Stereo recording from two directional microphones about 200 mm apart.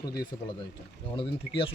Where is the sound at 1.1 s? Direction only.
25° left (ahead or behind).